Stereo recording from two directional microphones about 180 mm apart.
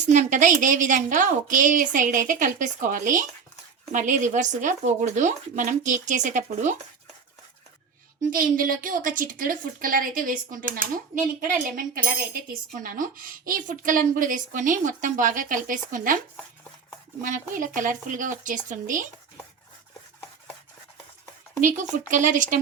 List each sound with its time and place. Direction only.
0.0 s speech: 45° right (ahead or behind)
8.3 s speech: 50° right (ahead or behind)
17.2 s speech: 45° right (ahead or behind)
21.7 s speech: 45° right (ahead or behind)